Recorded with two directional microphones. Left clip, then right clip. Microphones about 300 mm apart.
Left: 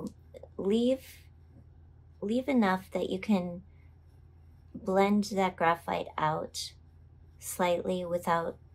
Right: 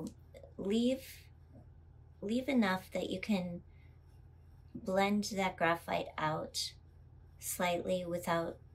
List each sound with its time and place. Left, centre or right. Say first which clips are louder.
0.3 s a sound: left 7 dB; centre
2.2 s a woman's voice: left 5 dB; centre
4.8 s a woman's voice: left 6 dB; centre